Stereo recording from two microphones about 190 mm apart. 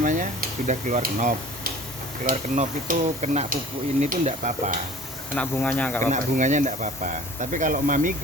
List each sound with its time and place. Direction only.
0.0 s speech: 45° right (ahead or behind)
5.4 s speech: 5° left (ahead or behind)
6.1 s speech: 40° right (ahead or behind)